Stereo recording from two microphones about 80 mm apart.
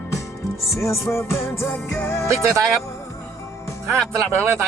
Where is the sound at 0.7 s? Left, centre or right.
Left.